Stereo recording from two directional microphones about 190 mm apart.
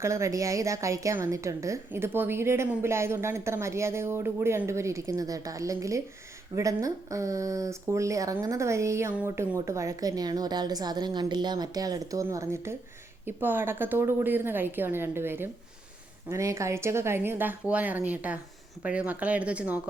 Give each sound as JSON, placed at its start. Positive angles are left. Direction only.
{"t": 0.0, "sound": "speech", "side_deg": -15}